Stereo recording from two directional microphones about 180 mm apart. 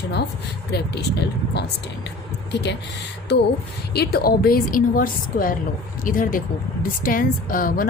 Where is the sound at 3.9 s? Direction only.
60° left (ahead or behind).